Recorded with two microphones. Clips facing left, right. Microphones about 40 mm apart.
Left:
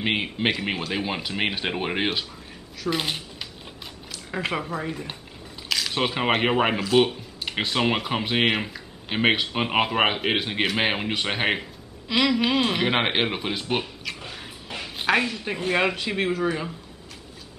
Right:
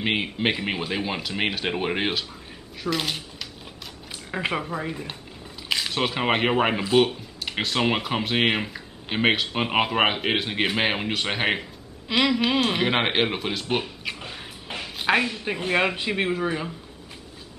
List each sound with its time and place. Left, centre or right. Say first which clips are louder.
0.0 s a man's voice: even; centre
4.3 s a man's voice: right 1 dB; centre
14.0 s a sound: right 1 dB; centre
15.0 s speech: even; centre